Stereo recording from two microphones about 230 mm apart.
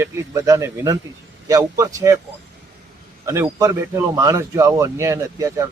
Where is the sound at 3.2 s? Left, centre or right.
Centre.